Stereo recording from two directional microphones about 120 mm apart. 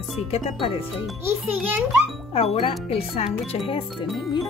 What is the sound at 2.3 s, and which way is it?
Speech, 55° left (ahead or behind).